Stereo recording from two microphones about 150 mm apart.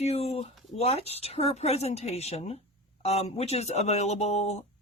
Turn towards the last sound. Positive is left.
turn(degrees=45)  # may be behind; listen again after turning